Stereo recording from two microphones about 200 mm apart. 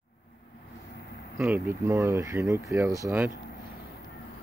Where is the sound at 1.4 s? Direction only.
10° right (ahead or behind).